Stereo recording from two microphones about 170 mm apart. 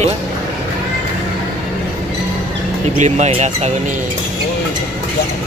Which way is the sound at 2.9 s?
45° right (ahead or behind).